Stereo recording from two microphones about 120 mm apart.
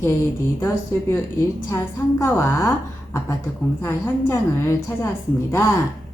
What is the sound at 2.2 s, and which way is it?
Speech, 20° left (ahead or behind).